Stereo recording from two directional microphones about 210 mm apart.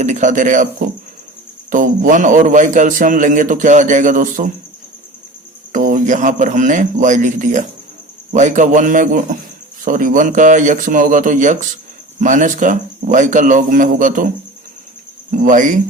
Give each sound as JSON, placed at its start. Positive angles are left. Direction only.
{"t": 0.0, "sound": "a man's voice", "side_deg": -35}
{"t": 5.7, "sound": "a man's voice", "side_deg": -40}
{"t": 15.3, "sound": "a man's voice", "side_deg": -40}